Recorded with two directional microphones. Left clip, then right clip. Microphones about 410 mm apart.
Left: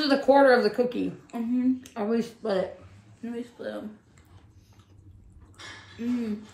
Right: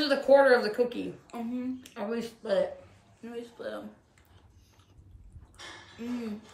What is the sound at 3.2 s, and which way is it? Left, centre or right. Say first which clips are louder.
Speech: left 3 dB; centre.